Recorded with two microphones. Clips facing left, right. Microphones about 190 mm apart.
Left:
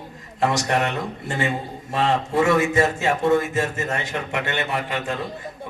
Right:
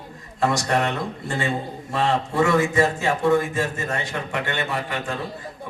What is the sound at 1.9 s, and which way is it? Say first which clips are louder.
A man's voice: left 2 dB; 20° left (ahead or behind).